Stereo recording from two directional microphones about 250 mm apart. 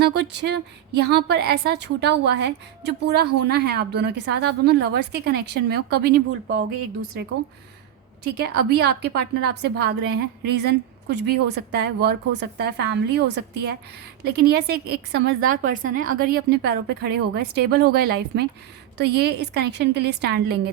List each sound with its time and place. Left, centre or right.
0.0 s a woman's voice: right
8.4 s a woman's voice: right